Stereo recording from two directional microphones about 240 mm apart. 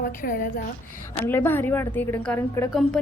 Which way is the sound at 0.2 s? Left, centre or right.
Left.